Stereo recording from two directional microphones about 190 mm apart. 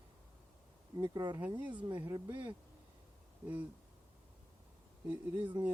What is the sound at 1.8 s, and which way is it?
Speech, 25° right (ahead or behind).